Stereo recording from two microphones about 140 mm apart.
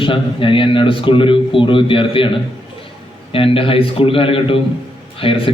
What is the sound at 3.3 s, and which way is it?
A man's voice, 40° left (ahead or behind).